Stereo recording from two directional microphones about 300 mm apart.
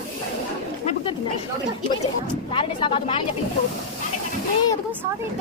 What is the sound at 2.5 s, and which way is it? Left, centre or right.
Speech, centre.